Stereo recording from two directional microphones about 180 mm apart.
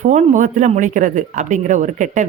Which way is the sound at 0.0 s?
40° right (ahead or behind).